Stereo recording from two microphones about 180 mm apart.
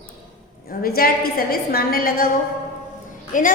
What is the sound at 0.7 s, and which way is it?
A woman's voice, 55° left (ahead or behind).